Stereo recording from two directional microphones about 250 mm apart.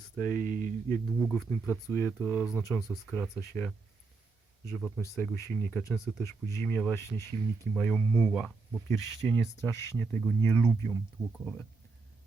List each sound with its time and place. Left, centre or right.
0.2 s speech: centre
0.4 s mantra: right
0.9 s speech: centre
1.2 s speech: centre
2.1 s speech: centre
5.1 s speech: centre